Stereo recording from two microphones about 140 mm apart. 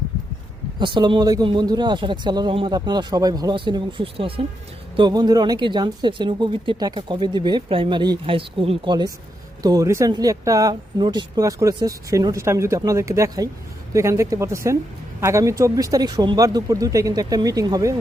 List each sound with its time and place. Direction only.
0.8 s speech: 35° right (ahead or behind)